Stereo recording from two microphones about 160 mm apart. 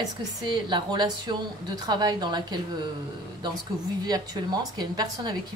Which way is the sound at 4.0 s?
25° right (ahead or behind).